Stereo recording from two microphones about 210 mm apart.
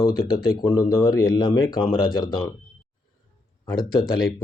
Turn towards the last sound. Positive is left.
turn(degrees=20)  # may be behind; listen again after turning